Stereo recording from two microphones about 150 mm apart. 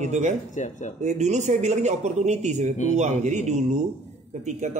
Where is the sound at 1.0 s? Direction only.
50° right (ahead or behind).